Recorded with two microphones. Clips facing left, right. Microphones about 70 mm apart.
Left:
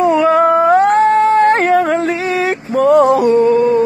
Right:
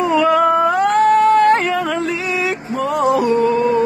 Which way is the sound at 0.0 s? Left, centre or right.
Left.